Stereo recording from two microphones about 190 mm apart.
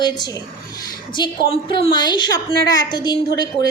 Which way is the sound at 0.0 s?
20° left (ahead or behind).